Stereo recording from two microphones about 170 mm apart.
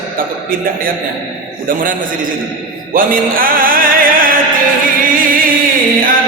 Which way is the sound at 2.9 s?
55° right (ahead or behind).